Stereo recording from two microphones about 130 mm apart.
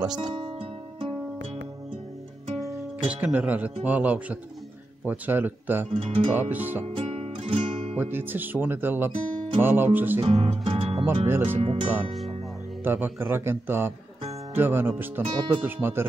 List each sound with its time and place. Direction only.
0.0 s music: 35° right (ahead or behind)
3.1 s speech: 10° right (ahead or behind)
5.9 s speech: 50° right (ahead or behind)
6.5 s speech: 15° right (ahead or behind)
6.8 s music: 50° right (ahead or behind)
8.0 s speech: 15° right (ahead or behind)
10.2 s speech: 50° right (ahead or behind)
11.2 s speech: 20° right (ahead or behind)
11.6 s speech: 45° right (ahead or behind)
12.8 s speech: 15° right (ahead or behind)